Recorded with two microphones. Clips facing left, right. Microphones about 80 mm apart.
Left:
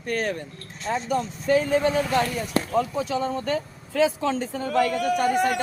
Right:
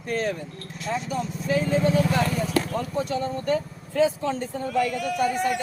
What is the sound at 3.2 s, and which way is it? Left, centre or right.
Speech, left.